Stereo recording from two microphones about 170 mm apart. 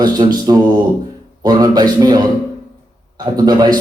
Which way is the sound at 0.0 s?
25° right (ahead or behind).